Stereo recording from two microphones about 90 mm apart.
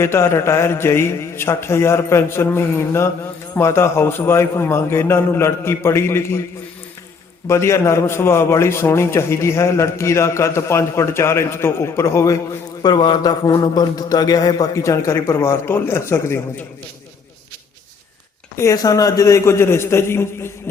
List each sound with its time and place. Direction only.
0.0 s a man's voice: 30° left (ahead or behind)
7.4 s a man's voice: 30° left (ahead or behind)
12.8 s a man's voice: 55° left (ahead or behind); by 16.6 s 30° left (ahead or behind)
18.5 s a man's voice: 35° left (ahead or behind)